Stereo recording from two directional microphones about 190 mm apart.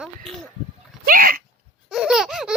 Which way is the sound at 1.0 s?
50° right (ahead or behind).